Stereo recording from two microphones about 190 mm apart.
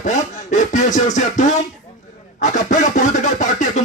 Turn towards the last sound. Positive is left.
turn(degrees=40)  # may be behind; listen again after turning